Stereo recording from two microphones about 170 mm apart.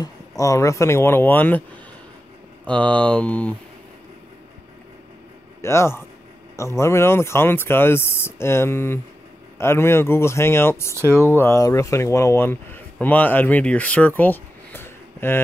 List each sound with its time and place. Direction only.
0.0 s speech: 20° left (ahead or behind)
2.6 s speech: 10° left (ahead or behind)
5.6 s speech: 15° left (ahead or behind)